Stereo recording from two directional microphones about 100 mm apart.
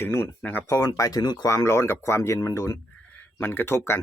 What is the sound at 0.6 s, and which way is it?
Speech, 35° left (ahead or behind).